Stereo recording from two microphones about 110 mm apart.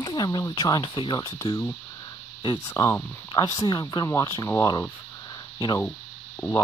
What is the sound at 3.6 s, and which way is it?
Speech, 40° left (ahead or behind).